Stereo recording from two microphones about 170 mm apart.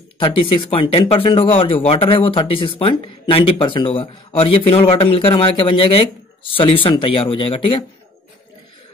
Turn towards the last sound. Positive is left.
turn(degrees=30)  # may be behind; listen again after turning